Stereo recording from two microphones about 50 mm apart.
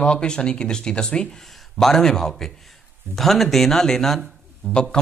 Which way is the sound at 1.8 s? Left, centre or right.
Centre.